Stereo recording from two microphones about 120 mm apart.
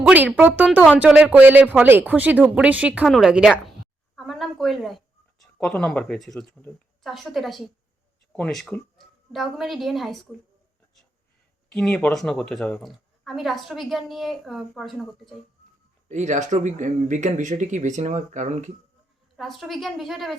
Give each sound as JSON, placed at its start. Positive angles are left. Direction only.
{"t": 0.1, "sound": "a woman's voice", "side_deg": -15}
{"t": 4.1, "sound": "a sound", "side_deg": 0}
{"t": 5.5, "sound": "a woman's voice", "side_deg": 5}
{"t": 11.7, "sound": "a woman's voice", "side_deg": 5}
{"t": 16.0, "sound": "speech", "side_deg": -85}
{"t": 19.4, "sound": "a woman's voice", "side_deg": 0}